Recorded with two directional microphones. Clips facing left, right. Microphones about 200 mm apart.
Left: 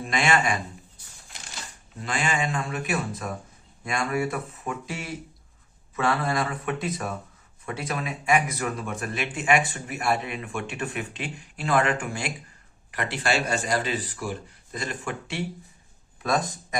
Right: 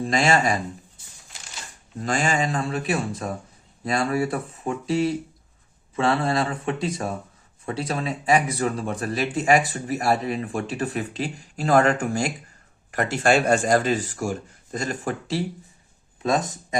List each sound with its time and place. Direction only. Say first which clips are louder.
0.0 s speech: right 4 dB; 35° right (ahead or behind)
2.0 s speech: right 4 dB; 40° right (ahead or behind)